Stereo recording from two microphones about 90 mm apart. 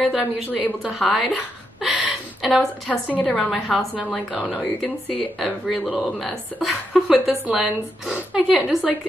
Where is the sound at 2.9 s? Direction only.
15° left (ahead or behind).